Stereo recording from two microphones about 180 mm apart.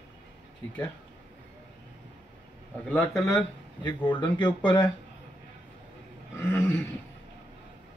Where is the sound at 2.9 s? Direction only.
15° left (ahead or behind).